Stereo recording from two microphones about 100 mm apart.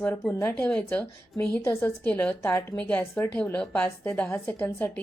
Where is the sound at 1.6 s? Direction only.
25° left (ahead or behind).